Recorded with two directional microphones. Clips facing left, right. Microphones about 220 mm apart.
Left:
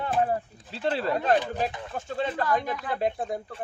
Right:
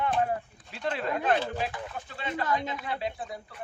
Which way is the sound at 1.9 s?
45° left (ahead or behind).